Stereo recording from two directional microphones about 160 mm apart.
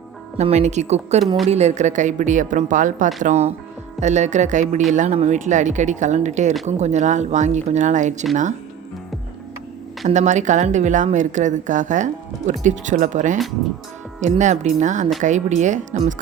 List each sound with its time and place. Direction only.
0.3 s a woman's voice: 45° right (ahead or behind)
3.2 s a woman's voice: 45° right (ahead or behind)
10.1 s a woman's voice: 45° right (ahead or behind)